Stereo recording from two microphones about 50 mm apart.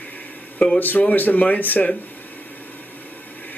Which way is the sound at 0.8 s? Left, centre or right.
Left.